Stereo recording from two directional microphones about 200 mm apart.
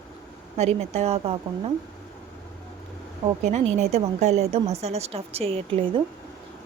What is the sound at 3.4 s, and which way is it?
A woman's voice, 35° right (ahead or behind).